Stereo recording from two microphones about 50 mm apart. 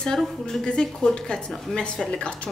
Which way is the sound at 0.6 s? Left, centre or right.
Centre.